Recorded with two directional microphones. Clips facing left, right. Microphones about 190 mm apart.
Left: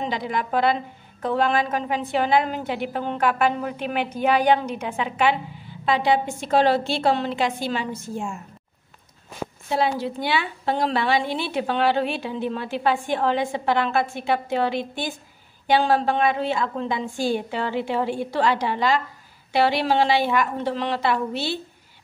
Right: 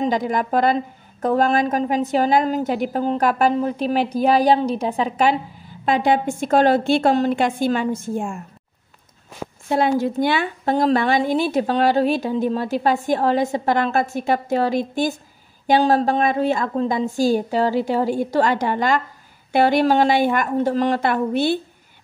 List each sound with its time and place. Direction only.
0.0 s a woman's voice: 45° right (ahead or behind)
9.7 s a woman's voice: 50° right (ahead or behind)